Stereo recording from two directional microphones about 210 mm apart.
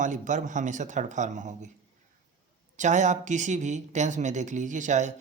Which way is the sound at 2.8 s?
35° right (ahead or behind).